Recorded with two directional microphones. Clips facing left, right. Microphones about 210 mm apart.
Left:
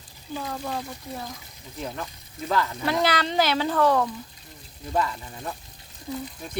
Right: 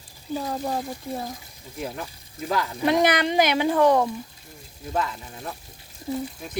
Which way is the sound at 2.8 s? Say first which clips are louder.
Right 8 dB; 20° right (ahead or behind).